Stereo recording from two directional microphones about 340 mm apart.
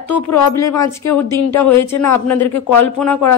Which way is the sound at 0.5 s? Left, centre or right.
Centre.